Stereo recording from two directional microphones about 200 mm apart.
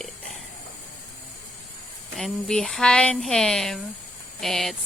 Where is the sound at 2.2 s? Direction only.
5° left (ahead or behind).